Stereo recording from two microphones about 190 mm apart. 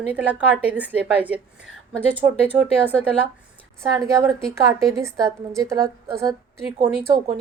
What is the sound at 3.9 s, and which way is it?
A woman's voice, 15° right (ahead or behind).